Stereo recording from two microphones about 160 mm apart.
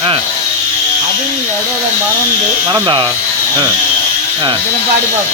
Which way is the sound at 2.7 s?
30° right (ahead or behind).